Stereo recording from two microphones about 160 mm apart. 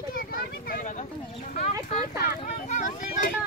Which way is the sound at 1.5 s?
45° left (ahead or behind).